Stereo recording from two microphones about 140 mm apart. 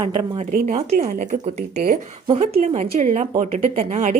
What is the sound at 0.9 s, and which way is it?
A woman's voice, 65° right (ahead or behind).